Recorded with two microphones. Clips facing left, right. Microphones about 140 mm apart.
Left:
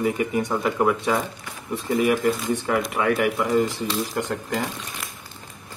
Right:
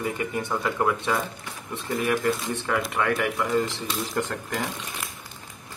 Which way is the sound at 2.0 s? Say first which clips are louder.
Left 2 dB; 15° left (ahead or behind).